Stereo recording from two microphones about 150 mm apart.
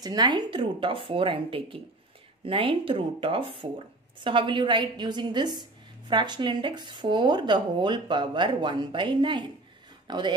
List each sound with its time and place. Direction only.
0.0 s speech: 30° right (ahead or behind)